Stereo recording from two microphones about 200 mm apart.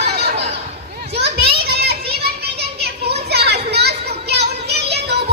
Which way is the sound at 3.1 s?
55° right (ahead or behind).